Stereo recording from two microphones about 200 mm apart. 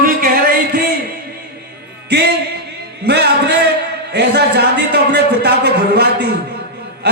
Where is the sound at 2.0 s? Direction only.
55° right (ahead or behind).